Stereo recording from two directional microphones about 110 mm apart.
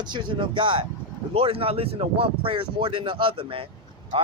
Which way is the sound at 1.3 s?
60° right (ahead or behind).